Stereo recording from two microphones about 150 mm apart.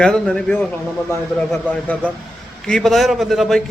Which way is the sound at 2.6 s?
5° left (ahead or behind).